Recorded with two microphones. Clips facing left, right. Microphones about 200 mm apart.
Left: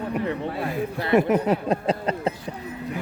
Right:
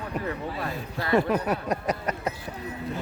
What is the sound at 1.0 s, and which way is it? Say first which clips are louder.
Speech: left 3 dB; 20° left (ahead or behind).